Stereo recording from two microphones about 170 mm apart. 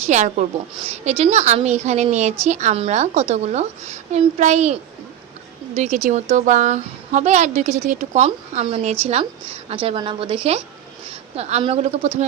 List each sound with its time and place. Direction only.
0.1 s a woman's voice: 45° right (ahead or behind)